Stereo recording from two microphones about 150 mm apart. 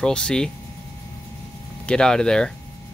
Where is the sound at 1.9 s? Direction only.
5° left (ahead or behind).